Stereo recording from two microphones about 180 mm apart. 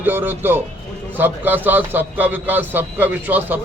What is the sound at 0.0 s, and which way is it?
A man's voice, 10° right (ahead or behind).